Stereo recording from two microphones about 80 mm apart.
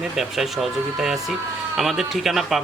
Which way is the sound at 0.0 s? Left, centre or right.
Centre.